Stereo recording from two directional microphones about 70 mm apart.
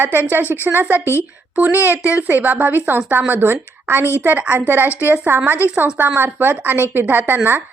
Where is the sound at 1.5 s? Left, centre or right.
Right.